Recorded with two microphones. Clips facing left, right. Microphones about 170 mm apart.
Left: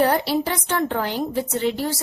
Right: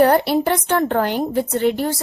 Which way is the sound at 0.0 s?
60° right (ahead or behind).